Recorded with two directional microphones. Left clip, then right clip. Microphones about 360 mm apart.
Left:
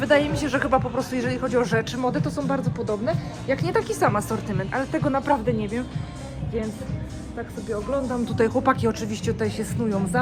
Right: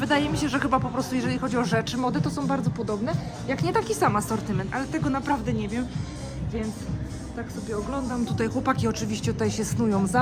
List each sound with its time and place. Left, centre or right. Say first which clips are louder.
0.0 s speech: left 4 dB; centre
7.7 s speech: left 5 dB; centre